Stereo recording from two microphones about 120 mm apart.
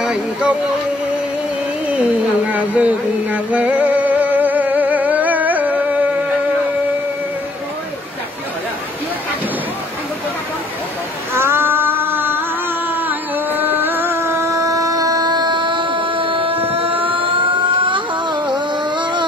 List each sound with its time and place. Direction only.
0.0 s music: 5° right (ahead or behind)
2.4 s music: 10° right (ahead or behind)
11.3 s a sound: 20° right (ahead or behind); by 19.2 s 40° right (ahead or behind)